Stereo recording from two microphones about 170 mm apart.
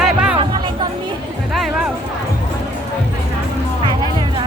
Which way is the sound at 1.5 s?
Centre (ahead or behind).